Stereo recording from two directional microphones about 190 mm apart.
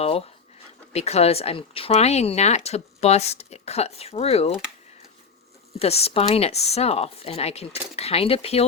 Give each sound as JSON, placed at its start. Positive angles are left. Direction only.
{"t": 0.0, "sound": "speech", "side_deg": 30}
{"t": 5.8, "sound": "speech", "side_deg": 30}